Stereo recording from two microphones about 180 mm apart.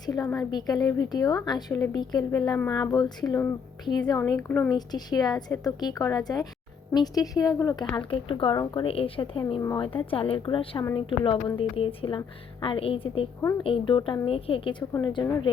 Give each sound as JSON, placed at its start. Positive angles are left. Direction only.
{"t": 0.0, "sound": "a woman's voice", "side_deg": 20}
{"t": 4.3, "sound": "a woman's voice", "side_deg": 10}
{"t": 4.9, "sound": "a woman's voice", "side_deg": 20}
{"t": 9.6, "sound": "a woman's voice", "side_deg": 20}
{"t": 9.8, "sound": "a woman's voice", "side_deg": 30}